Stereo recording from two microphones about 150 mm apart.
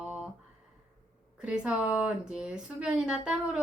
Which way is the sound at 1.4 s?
5° right (ahead or behind).